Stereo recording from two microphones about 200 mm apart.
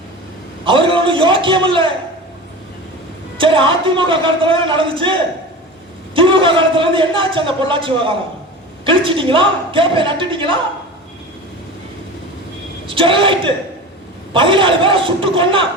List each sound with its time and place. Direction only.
0.6 s a man's voice: 25° right (ahead or behind)
3.3 s a man's voice: 25° right (ahead or behind)
6.1 s a man's voice: 25° right (ahead or behind)
12.9 s a man's voice: 25° right (ahead or behind)